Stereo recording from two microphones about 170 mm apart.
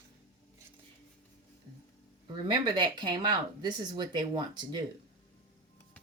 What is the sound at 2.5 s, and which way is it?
Speech, 25° right (ahead or behind).